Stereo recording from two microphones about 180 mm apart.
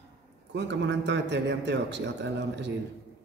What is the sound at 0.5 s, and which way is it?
A man's voice, 75° right (ahead or behind).